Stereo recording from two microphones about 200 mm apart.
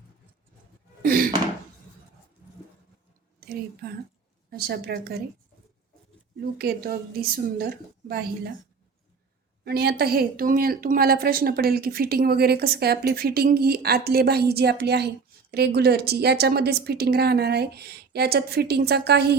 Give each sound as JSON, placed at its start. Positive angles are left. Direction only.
{"t": 1.0, "sound": "a sound", "side_deg": -45}
{"t": 3.4, "sound": "a woman's voice", "side_deg": -50}
{"t": 6.4, "sound": "a woman's voice", "side_deg": -50}
{"t": 9.6, "sound": "a woman's voice", "side_deg": -50}